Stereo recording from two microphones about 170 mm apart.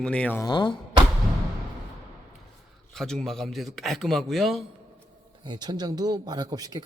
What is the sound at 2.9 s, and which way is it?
A man's voice, 5° left (ahead or behind).